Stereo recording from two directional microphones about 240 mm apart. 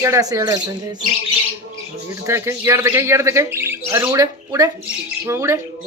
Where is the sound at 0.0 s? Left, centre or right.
Centre.